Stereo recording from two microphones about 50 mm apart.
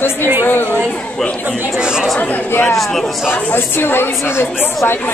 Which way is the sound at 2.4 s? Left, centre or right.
Left.